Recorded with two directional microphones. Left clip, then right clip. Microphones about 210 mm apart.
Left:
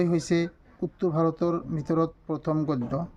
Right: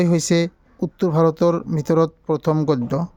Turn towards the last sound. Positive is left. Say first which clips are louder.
# right 8 dB
turn(degrees=-55)  # may be behind; listen again after turning